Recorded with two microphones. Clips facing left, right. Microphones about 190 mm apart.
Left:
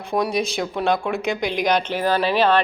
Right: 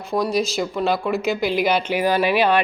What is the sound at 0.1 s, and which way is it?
A woman's voice, centre (ahead or behind).